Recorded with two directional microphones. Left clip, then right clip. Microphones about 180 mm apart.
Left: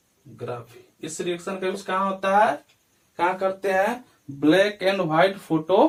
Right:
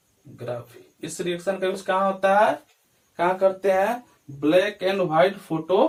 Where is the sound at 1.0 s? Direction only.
15° right (ahead or behind).